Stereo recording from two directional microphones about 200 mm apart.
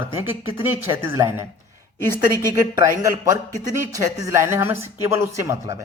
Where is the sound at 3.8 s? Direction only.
15° right (ahead or behind).